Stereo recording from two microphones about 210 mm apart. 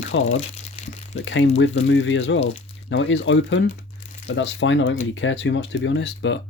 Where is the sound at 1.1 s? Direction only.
60° left (ahead or behind).